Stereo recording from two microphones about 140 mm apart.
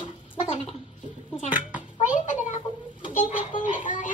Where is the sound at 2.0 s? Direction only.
65° left (ahead or behind).